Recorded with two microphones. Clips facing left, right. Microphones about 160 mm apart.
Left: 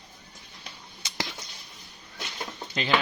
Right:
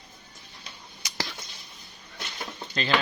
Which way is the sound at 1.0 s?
25° left (ahead or behind).